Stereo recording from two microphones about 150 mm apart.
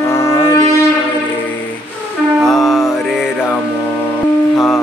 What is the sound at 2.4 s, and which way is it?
Music, centre (ahead or behind).